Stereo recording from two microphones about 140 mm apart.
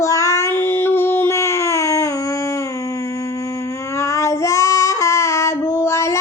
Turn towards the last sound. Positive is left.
turn(degrees=20)  # may be behind; listen again after turning